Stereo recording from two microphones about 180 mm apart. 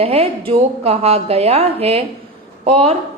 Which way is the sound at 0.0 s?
35° right (ahead or behind).